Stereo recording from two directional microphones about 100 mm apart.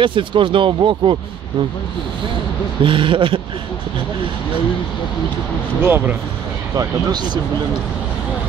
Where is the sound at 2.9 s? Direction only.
60° right (ahead or behind).